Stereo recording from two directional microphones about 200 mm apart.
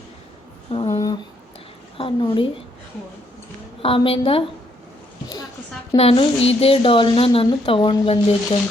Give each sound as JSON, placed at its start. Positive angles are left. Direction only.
{"t": 0.7, "sound": "a sound", "side_deg": 30}
{"t": 2.0, "sound": "speech", "side_deg": 25}
{"t": 3.8, "sound": "speech", "side_deg": 30}
{"t": 6.0, "sound": "speech", "side_deg": 30}